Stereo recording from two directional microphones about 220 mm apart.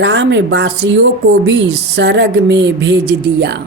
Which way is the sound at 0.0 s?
50° right (ahead or behind).